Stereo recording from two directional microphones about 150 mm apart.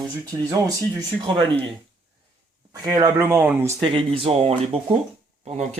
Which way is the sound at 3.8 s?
35° right (ahead or behind).